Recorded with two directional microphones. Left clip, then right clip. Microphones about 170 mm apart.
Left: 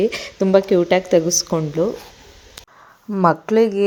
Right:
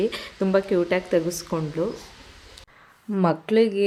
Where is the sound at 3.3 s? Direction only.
15° left (ahead or behind).